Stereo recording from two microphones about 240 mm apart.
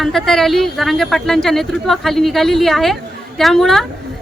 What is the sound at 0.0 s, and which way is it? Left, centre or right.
A woman's voice, centre.